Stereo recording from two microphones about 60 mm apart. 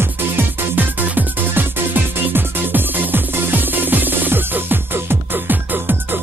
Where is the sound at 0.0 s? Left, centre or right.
Right.